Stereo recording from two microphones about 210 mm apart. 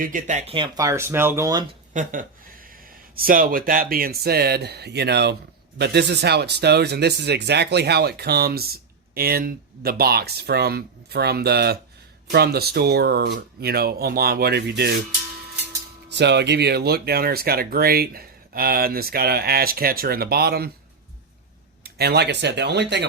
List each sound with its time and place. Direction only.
0.0 s speech: 35° right (ahead or behind); by 1.6 s 15° right (ahead or behind)
1.9 s a sound: 35° right (ahead or behind)
3.2 s speech: 45° right (ahead or behind)
16.1 s speech: 55° right (ahead or behind)
21.8 s speech: 50° right (ahead or behind)